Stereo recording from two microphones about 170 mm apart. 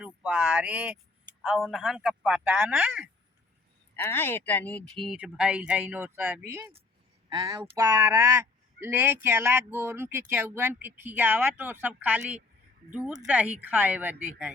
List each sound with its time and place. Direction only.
0.0 s speech: 5° right (ahead or behind)
3.9 s speech: 15° left (ahead or behind)
5.2 s speech: 5° right (ahead or behind)